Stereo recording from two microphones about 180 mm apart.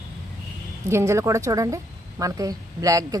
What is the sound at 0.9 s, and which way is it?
A woman's voice, 15° right (ahead or behind).